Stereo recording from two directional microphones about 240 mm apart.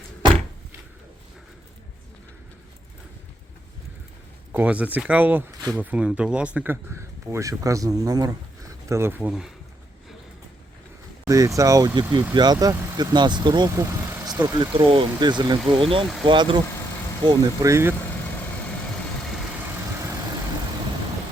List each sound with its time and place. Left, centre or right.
4.5 s speech: centre
11.3 s speech: centre